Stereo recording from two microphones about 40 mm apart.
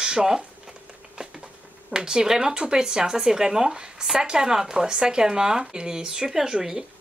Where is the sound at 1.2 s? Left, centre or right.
Right.